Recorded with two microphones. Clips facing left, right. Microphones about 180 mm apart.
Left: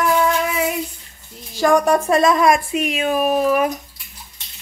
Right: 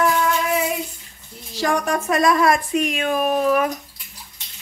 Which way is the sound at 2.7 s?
5° left (ahead or behind).